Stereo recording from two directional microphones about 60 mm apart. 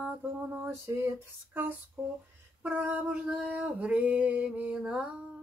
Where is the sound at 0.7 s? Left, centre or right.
Right.